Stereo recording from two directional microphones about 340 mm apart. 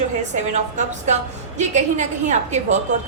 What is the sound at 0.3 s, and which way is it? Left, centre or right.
A woman's voice, right.